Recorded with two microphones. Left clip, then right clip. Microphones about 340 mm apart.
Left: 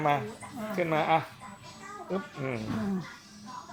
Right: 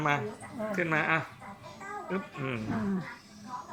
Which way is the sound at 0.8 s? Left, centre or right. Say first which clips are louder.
Left 2 dB; centre.